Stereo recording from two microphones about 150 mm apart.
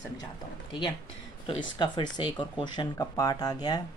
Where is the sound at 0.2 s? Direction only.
30° left (ahead or behind).